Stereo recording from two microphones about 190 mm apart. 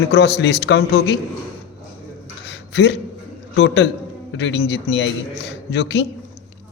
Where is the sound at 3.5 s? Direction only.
65° left (ahead or behind).